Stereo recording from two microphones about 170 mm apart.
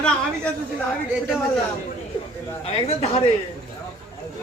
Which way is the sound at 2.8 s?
35° left (ahead or behind).